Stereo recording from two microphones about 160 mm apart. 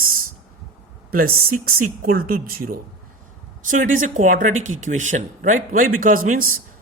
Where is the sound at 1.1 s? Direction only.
70° right (ahead or behind).